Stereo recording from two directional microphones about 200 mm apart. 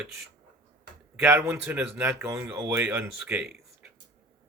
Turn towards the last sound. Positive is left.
turn(degrees=-10)  # may be behind; listen again after turning